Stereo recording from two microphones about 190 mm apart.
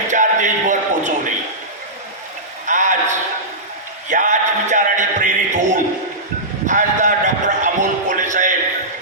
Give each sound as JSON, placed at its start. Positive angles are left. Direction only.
{"t": 0.1, "sound": "music", "side_deg": -40}
{"t": 2.6, "sound": "a sound", "side_deg": -40}
{"t": 4.1, "sound": "music", "side_deg": -40}